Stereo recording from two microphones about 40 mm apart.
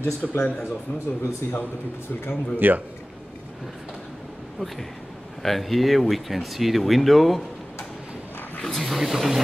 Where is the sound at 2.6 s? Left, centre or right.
Right.